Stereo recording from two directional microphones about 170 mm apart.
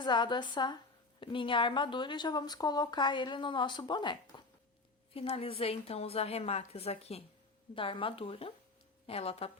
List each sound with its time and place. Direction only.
0.0 s a woman's voice: 25° left (ahead or behind)